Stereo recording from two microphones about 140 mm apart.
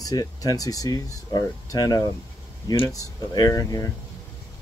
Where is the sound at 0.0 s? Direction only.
25° left (ahead or behind).